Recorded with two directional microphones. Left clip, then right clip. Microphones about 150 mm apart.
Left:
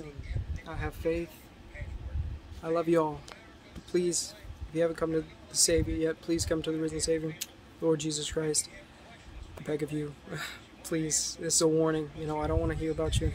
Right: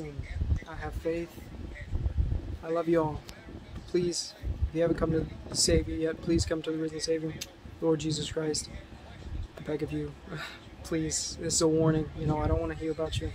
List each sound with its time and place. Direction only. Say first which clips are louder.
0.7 s speech: left 2 dB; 10° left (ahead or behind)
2.6 s speech: left 1 dB; 10° left (ahead or behind)